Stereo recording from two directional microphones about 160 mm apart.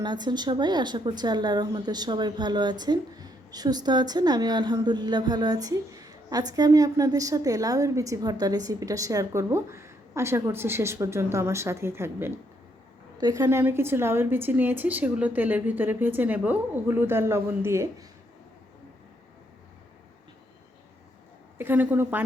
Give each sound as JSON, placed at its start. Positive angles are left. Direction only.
{"t": 0.0, "sound": "a woman's voice", "side_deg": -25}
{"t": 21.6, "sound": "a woman's voice", "side_deg": -10}